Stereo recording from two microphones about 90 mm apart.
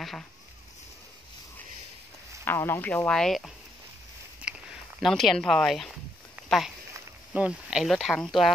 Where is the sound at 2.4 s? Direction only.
25° left (ahead or behind).